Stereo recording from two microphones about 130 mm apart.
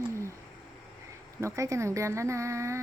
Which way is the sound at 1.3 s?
20° right (ahead or behind).